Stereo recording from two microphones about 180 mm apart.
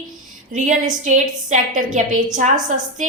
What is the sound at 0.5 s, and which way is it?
A woman's voice, 40° right (ahead or behind).